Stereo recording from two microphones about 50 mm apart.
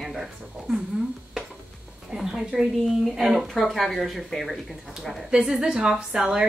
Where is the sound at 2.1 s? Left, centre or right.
Centre.